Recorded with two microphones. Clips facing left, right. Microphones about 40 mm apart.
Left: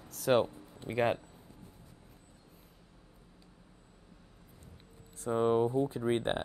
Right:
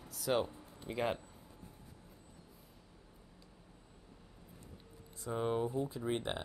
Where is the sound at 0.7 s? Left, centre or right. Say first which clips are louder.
Left 6 dB; left.